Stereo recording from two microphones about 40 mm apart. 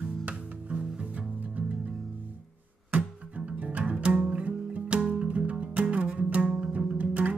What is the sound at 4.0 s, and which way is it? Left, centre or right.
Music, right.